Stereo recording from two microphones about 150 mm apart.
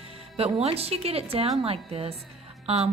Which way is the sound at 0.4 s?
40° right (ahead or behind).